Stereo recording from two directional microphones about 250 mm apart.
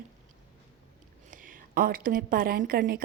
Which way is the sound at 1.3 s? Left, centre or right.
Right.